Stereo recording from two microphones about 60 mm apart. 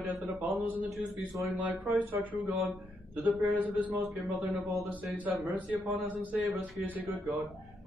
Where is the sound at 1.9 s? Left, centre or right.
Right.